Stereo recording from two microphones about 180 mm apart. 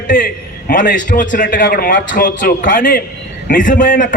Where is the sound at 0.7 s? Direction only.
45° left (ahead or behind).